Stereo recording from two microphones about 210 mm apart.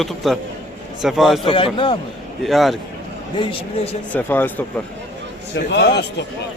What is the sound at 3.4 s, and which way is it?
Speech, 25° left (ahead or behind).